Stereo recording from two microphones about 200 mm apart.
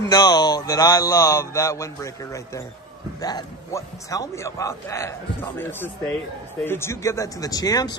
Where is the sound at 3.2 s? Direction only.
20° left (ahead or behind).